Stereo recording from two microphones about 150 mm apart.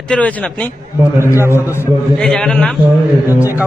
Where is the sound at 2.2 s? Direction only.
5° left (ahead or behind).